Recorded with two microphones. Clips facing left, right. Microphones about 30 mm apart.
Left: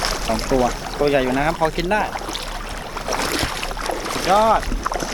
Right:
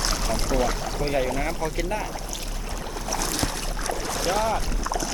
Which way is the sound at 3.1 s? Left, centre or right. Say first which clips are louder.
Left 6 dB; left.